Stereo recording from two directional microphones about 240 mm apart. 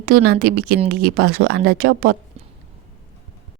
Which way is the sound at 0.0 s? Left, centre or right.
Right.